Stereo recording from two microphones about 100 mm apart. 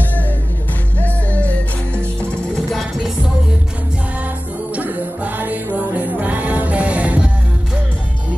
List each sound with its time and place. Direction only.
1.0 s music: 15° left (ahead or behind)
2.7 s music: centre (ahead or behind)
4.7 s music: 15° right (ahead or behind)